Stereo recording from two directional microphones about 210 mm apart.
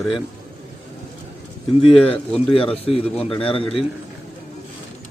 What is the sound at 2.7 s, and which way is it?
Speech, 25° left (ahead or behind).